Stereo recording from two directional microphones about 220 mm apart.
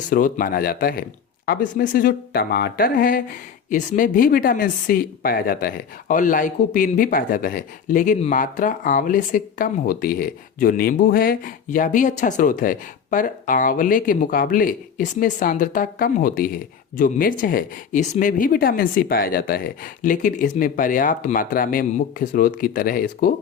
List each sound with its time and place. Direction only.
0.1 s speech: 40° left (ahead or behind)